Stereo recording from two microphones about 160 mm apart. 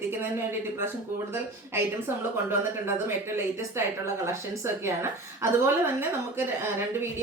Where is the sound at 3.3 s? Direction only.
15° right (ahead or behind).